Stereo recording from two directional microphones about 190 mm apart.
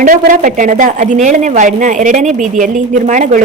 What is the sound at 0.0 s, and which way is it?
A woman's voice, 45° right (ahead or behind).